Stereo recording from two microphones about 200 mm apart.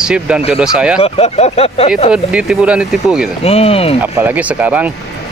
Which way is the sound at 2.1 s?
5° right (ahead or behind).